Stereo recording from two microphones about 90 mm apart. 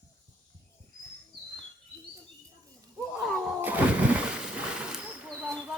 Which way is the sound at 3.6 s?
20° right (ahead or behind).